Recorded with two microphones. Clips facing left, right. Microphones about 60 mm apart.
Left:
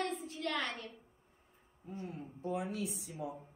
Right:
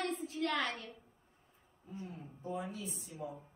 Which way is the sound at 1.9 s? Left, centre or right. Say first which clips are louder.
Left 3 dB; left.